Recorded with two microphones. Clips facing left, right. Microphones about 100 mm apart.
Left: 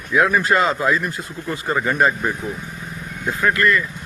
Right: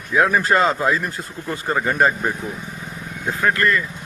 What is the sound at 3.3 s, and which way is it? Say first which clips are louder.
Speech: left 1 dB; 35° right (ahead or behind).